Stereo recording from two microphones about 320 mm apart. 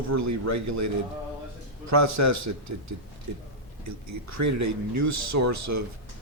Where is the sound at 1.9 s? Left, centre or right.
Right.